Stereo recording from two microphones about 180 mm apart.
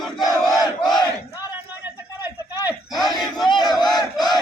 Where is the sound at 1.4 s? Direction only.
10° right (ahead or behind).